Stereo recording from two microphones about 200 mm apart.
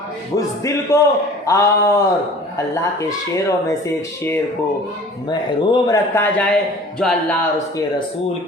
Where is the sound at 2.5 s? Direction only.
15° left (ahead or behind).